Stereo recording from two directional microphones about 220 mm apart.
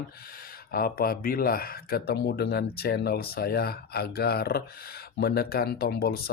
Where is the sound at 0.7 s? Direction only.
40° left (ahead or behind).